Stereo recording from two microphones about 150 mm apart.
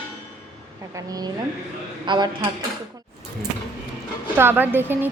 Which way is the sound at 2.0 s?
30° right (ahead or behind).